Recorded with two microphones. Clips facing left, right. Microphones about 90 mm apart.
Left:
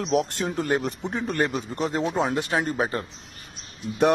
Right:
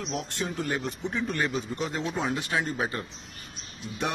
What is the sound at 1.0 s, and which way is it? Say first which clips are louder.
Speech: left 3 dB; 45° left (ahead or behind).